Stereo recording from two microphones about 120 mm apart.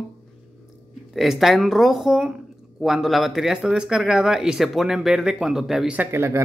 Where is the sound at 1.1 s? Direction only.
Centre (ahead or behind).